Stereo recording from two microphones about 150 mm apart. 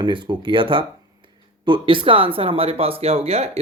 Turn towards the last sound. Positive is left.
turn(degrees=-45)  # may be behind; listen again after turning